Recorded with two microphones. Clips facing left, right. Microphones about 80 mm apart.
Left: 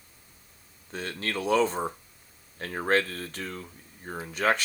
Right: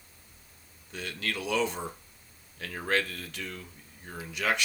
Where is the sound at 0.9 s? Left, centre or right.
Left.